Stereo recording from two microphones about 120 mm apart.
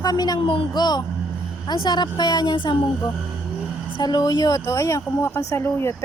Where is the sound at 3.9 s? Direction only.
35° left (ahead or behind).